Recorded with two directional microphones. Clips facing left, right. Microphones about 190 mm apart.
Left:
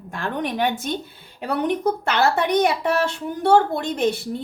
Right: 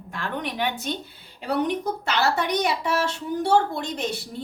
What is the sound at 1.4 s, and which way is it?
A woman's voice, 55° left (ahead or behind).